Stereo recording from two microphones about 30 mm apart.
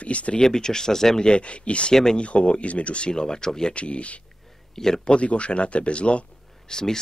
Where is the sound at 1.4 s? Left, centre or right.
Left.